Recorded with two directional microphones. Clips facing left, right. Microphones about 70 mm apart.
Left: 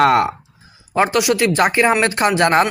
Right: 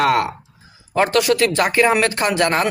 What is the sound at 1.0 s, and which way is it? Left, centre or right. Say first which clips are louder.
Speech: even; centre.